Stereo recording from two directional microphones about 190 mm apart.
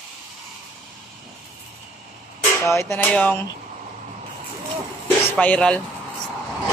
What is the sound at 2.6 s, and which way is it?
Speech, 15° left (ahead or behind).